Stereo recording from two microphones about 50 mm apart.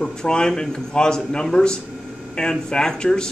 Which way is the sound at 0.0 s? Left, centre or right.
Centre.